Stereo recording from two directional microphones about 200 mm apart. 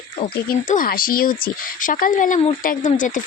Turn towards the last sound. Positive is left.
turn(degrees=40)  # may be behind; listen again after turning